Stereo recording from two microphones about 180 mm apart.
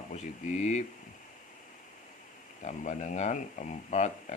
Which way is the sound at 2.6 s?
40° left (ahead or behind).